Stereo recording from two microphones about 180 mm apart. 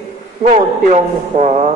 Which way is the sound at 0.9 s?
40° right (ahead or behind).